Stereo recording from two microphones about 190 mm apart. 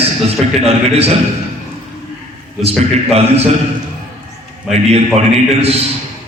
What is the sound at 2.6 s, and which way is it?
Speech, 30° right (ahead or behind).